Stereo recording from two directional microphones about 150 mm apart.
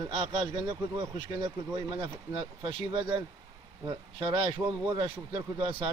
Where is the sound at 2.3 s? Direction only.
35° right (ahead or behind).